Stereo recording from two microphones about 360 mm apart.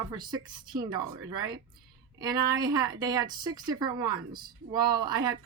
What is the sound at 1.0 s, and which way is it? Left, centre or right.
Speech, right.